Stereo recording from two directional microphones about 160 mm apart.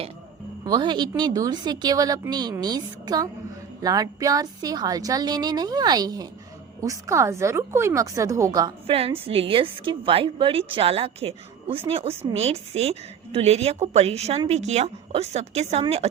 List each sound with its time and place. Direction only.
0.6 s a woman's voice: 25° right (ahead or behind)
9.2 s a woman's voice: 35° right (ahead or behind)